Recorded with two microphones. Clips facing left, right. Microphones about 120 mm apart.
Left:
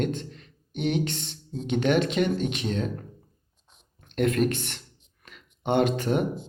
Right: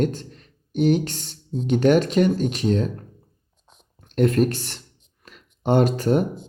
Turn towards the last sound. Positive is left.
turn(degrees=-40)  # may be behind; listen again after turning